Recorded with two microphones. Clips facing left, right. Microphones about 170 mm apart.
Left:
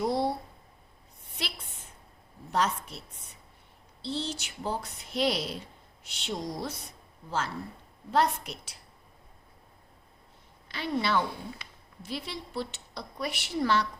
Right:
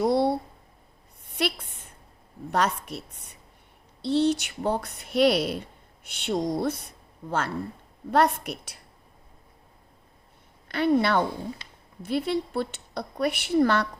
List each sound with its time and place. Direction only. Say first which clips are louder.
0.0 s a sound: right 6 dB; 65° right (ahead or behind)
2.5 s a woman's voice: right 3 dB; 65° right (ahead or behind)
4.0 s a woman's voice: right 12 dB; 65° right (ahead or behind)
10.7 s a woman's voice: right 8 dB; 55° right (ahead or behind)